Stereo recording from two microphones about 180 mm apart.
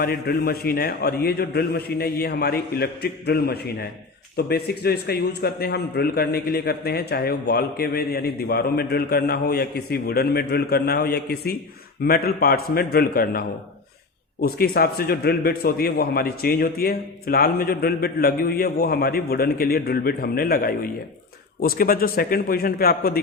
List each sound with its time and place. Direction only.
0.0 s a man's voice: 60° left (ahead or behind)
14.4 s a man's voice: 60° left (ahead or behind)